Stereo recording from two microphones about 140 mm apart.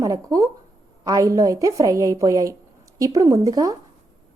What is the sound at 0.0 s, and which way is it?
A woman's voice, 25° right (ahead or behind).